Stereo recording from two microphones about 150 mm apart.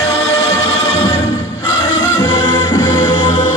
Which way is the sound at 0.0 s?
25° left (ahead or behind).